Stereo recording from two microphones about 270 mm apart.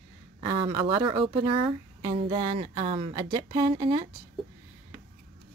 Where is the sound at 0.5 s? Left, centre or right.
Centre.